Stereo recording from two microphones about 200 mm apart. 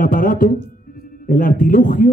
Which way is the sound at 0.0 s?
45° left (ahead or behind).